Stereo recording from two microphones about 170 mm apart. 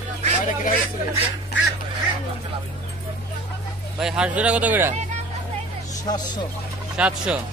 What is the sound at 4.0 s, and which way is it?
Speech, 5° right (ahead or behind).